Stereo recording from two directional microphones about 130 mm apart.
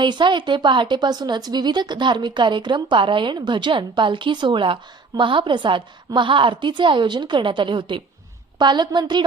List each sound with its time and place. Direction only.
0.0 s speech: 35° right (ahead or behind)